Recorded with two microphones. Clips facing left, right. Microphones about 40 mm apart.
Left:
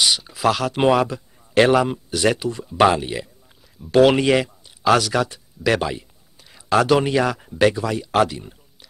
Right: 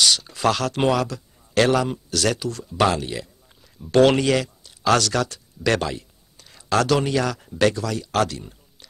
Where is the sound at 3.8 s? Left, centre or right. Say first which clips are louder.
Left 2 dB; centre.